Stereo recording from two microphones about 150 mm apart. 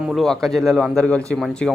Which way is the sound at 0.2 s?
Centre (ahead or behind).